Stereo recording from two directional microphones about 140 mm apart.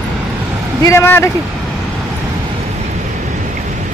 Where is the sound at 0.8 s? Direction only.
15° left (ahead or behind).